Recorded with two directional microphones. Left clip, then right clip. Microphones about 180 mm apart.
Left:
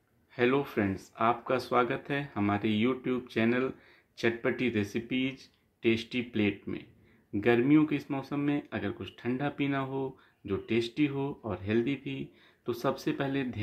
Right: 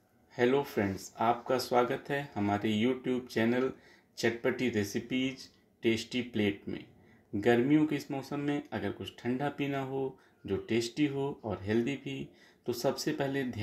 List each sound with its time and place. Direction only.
0.4 s speech: 15° left (ahead or behind)